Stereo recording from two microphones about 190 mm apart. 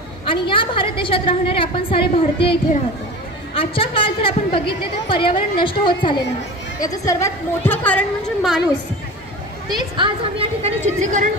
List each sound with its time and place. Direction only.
0.2 s a woman's voice: 25° left (ahead or behind); by 8.5 s 5° left (ahead or behind)
9.7 s speech: 25° right (ahead or behind)